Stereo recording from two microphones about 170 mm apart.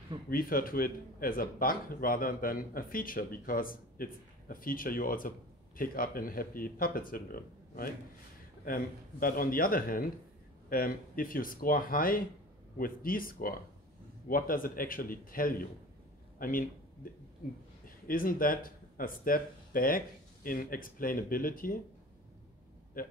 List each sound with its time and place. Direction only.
0.3 s a man's voice: 55° left (ahead or behind)
23.0 s a man's voice: 55° left (ahead or behind)